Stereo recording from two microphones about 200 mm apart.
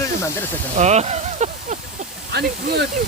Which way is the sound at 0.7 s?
35° right (ahead or behind).